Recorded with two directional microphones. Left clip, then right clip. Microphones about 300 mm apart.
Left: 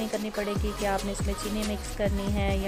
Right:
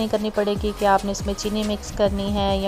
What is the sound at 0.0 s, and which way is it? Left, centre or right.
Music, centre.